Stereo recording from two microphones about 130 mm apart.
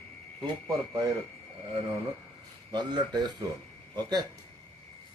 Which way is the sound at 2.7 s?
35° right (ahead or behind).